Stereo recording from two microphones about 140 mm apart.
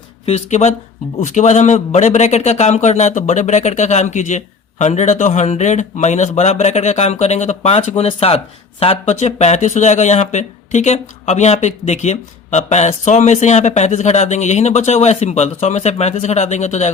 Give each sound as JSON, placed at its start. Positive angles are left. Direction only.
{"t": 0.3, "sound": "speech", "side_deg": 50}